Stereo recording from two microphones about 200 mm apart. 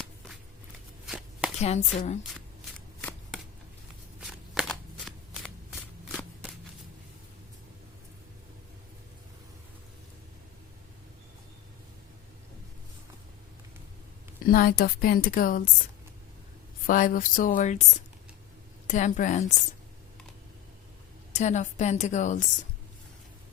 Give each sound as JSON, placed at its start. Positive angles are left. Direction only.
{"t": 1.0, "sound": "a sound", "side_deg": -5}
{"t": 1.6, "sound": "speech", "side_deg": 35}
{"t": 2.7, "sound": "shuffling cards", "side_deg": 5}
{"t": 14.4, "sound": "a woman's voice", "side_deg": 45}
{"t": 16.8, "sound": "speech", "side_deg": 45}
{"t": 21.3, "sound": "speech", "side_deg": 35}